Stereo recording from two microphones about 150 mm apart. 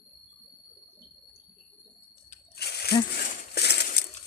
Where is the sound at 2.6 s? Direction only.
90° left.